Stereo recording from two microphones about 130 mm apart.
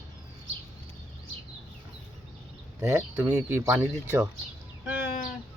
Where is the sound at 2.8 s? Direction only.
25° right (ahead or behind).